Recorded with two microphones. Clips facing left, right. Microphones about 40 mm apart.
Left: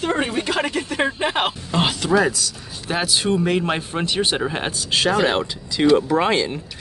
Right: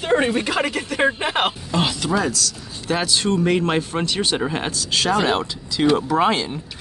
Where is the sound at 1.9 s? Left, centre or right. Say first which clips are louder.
Left 3 dB; centre.